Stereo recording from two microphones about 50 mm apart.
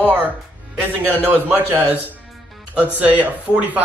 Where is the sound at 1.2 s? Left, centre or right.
Right.